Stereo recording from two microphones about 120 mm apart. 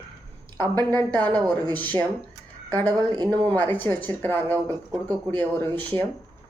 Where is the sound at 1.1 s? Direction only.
15° left (ahead or behind).